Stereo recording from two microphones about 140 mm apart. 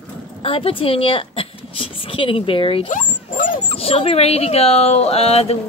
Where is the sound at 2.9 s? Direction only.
70° left (ahead or behind).